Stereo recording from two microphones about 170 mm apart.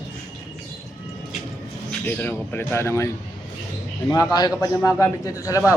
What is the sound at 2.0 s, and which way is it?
Speech, 10° left (ahead or behind).